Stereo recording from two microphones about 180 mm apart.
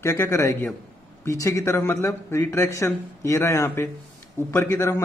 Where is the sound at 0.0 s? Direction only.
15° left (ahead or behind).